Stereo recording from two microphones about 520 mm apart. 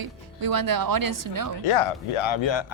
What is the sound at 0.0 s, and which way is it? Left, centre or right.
A woman's voice, right.